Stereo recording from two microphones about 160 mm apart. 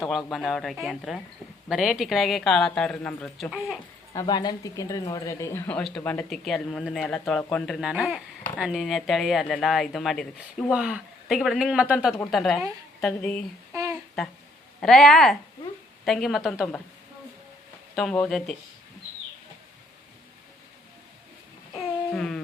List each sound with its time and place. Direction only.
0.1 s speech: centre (ahead or behind)
4.1 s speech: 25° left (ahead or behind); by 13.4 s 5° left (ahead or behind)
13.7 s a sound: 20° right (ahead or behind)
14.8 s speech: centre (ahead or behind)
17.9 s speech: 5° left (ahead or behind)
22.1 s humming: 5° left (ahead or behind)